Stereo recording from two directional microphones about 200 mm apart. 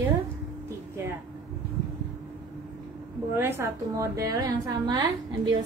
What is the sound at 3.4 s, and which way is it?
A woman's voice, 15° right (ahead or behind).